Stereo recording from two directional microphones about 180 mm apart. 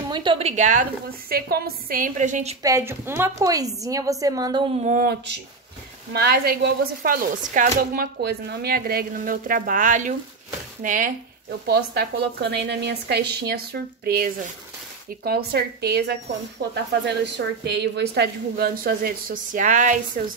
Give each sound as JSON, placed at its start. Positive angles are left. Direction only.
{"t": 0.1, "sound": "a woman's voice", "side_deg": -25}
{"t": 1.3, "sound": "a woman's voice", "side_deg": -55}
{"t": 2.6, "sound": "a woman's voice", "side_deg": -15}
{"t": 5.0, "sound": "a woman's voice", "side_deg": -70}
{"t": 11.6, "sound": "speech", "side_deg": -65}
{"t": 16.9, "sound": "a woman's voice", "side_deg": -70}